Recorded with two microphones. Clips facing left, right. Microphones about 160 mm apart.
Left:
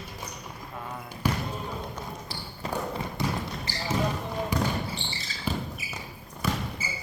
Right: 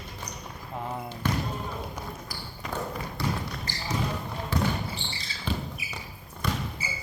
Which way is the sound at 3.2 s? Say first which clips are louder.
Even; 20° left (ahead or behind).